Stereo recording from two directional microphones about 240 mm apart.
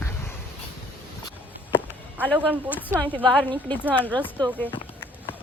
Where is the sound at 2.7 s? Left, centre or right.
Centre.